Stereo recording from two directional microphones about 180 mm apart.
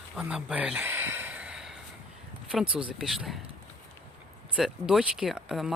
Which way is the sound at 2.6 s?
30° right (ahead or behind).